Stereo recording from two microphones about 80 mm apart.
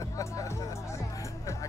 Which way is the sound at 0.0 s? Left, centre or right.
Left.